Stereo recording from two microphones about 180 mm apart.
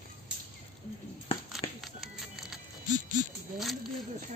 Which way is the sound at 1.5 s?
Centre (ahead or behind).